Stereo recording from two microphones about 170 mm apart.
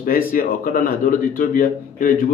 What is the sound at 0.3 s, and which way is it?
A man's voice, 55° left (ahead or behind).